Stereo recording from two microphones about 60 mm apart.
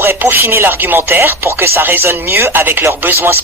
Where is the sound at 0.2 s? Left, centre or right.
Right.